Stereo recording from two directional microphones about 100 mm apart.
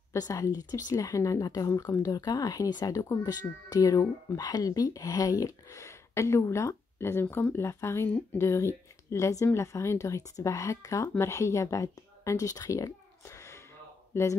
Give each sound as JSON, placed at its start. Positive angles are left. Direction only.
{"t": 0.1, "sound": "speech", "side_deg": 35}